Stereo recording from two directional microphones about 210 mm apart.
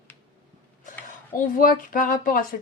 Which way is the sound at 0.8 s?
40° left (ahead or behind).